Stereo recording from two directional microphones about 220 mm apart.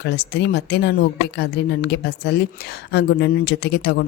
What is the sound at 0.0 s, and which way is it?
A woman's voice, 50° left (ahead or behind).